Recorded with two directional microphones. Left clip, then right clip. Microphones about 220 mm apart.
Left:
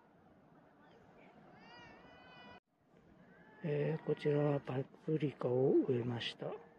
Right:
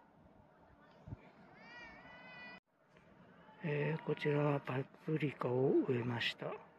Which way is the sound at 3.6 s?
10° left (ahead or behind).